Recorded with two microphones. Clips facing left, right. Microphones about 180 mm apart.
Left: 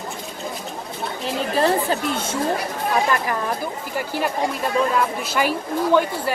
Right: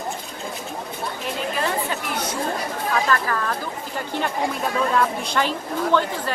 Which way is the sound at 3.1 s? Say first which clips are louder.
Left 1 dB; 15° left (ahead or behind).